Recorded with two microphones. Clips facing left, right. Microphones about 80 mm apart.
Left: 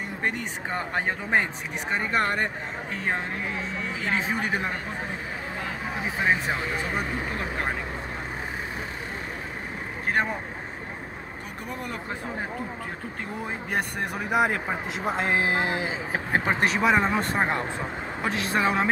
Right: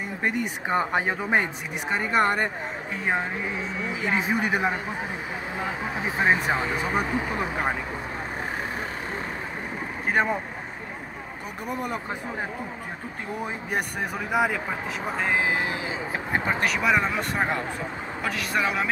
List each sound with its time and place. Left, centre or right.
0.2 s speech: centre
6.1 s speech: centre
13.4 s speech: centre
14.1 s speech: centre
15.6 s speech: left